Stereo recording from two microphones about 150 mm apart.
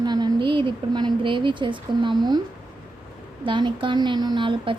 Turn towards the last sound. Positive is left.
turn(degrees=-35)  # may be behind; listen again after turning